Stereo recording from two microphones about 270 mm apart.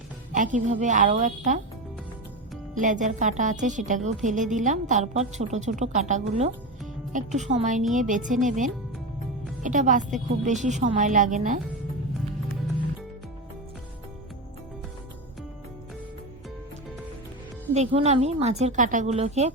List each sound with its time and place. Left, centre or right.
0.3 s speech: right
2.7 s speech: right
17.7 s speech: right